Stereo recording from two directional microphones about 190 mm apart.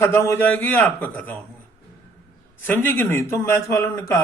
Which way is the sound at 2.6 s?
10° left (ahead or behind).